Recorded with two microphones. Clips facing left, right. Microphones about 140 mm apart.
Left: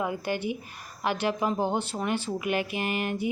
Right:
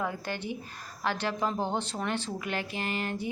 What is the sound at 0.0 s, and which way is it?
A woman's voice, 15° left (ahead or behind).